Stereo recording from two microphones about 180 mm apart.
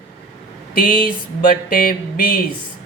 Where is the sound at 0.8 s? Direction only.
50° left (ahead or behind).